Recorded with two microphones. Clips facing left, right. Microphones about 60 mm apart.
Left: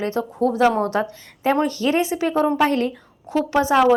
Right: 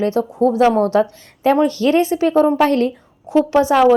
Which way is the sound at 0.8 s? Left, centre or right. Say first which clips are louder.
Right 6 dB; left.